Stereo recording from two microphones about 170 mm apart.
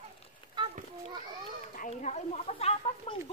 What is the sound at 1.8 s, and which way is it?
Speech, 40° left (ahead or behind).